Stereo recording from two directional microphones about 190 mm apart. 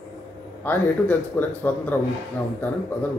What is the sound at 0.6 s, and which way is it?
Speech, 10° left (ahead or behind).